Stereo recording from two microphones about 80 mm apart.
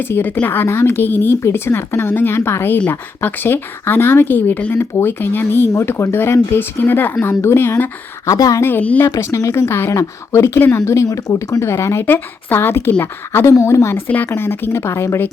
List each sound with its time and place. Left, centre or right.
0.0 s speech: left
8.3 s a woman's voice: left
13.5 s speech: left